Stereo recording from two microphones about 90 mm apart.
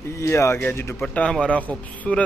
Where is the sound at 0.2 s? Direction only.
30° left (ahead or behind).